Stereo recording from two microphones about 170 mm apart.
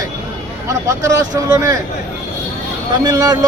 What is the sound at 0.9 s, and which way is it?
Speech, 15° right (ahead or behind).